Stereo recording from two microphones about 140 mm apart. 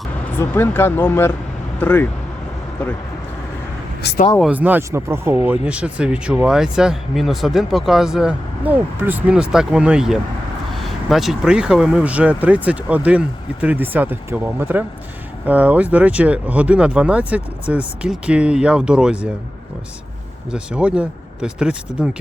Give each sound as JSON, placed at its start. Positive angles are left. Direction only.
{"t": 0.3, "sound": "speech", "side_deg": 15}
{"t": 4.5, "sound": "speech", "side_deg": -10}
{"t": 20.5, "sound": "speech", "side_deg": -5}